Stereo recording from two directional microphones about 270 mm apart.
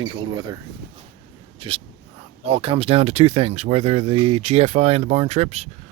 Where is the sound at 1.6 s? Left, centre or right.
Centre.